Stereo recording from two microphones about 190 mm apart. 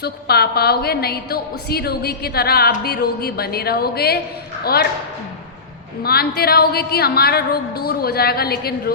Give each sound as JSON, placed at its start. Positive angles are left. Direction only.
{"t": 0.0, "sound": "a woman's voice", "side_deg": 55}
{"t": 6.0, "sound": "a woman's voice", "side_deg": 55}